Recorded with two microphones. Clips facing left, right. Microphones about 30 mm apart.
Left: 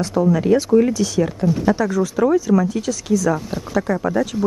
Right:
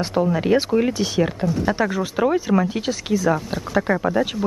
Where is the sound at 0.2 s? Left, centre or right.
Right.